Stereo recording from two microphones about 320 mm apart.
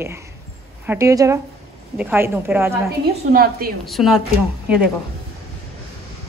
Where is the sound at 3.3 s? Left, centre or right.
Right.